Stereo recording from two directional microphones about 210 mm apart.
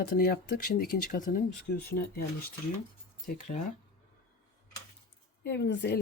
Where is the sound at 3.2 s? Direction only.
35° left (ahead or behind).